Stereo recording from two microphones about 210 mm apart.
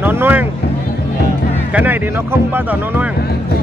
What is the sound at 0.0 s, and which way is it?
Vehicle, 10° right (ahead or behind).